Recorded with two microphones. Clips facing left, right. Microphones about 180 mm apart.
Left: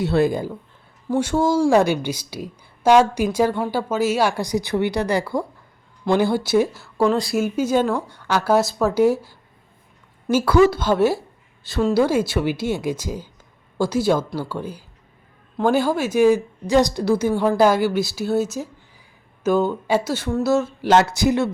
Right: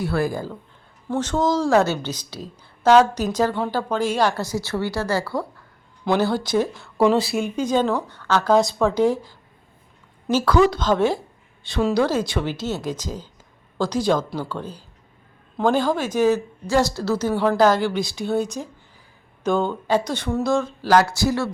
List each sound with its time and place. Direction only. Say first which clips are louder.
0.0 s a woman's voice: left 4 dB; 20° left (ahead or behind)
10.3 s a woman's voice: left 2 dB; 10° left (ahead or behind)
20.8 s speech: left 1 dB; 20° left (ahead or behind)